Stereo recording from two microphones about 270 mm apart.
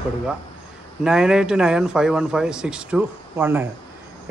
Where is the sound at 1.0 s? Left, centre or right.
Centre.